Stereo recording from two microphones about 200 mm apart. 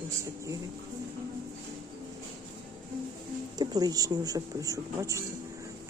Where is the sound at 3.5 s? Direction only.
20° right (ahead or behind).